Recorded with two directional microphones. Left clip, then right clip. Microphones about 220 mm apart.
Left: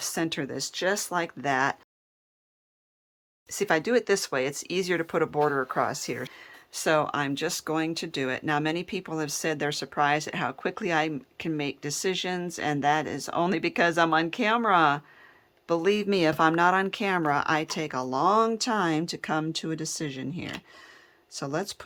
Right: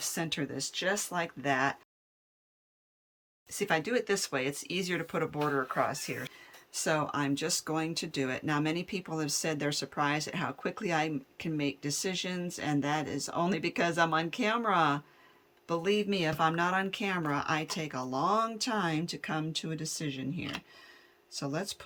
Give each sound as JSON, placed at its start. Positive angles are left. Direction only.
{"t": 0.0, "sound": "speech", "side_deg": 15}
{"t": 3.5, "sound": "speech", "side_deg": 20}
{"t": 5.5, "sound": "speech", "side_deg": 30}
{"t": 6.7, "sound": "speech", "side_deg": 10}